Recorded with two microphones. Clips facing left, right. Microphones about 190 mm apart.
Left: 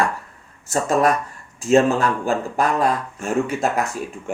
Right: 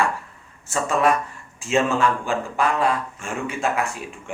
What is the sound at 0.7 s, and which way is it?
Speech, 40° left (ahead or behind).